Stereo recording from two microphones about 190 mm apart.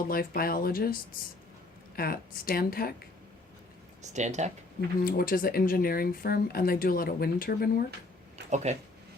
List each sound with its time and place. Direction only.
0.1 s speech: 50° left (ahead or behind)
2.0 s speech: 50° left (ahead or behind)
4.0 s speech: 40° right (ahead or behind)
5.0 s speech: 50° left (ahead or behind)
8.4 s speech: 40° right (ahead or behind)